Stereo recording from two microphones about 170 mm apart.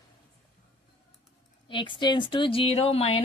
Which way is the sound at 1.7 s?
30° left (ahead or behind).